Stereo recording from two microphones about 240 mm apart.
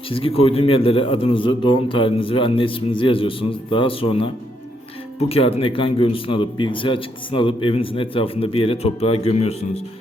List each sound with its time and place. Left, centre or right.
0.1 s a man's voice: left
5.3 s a man's voice: left